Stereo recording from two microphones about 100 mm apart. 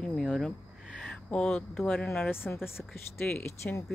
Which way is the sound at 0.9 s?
10° left (ahead or behind).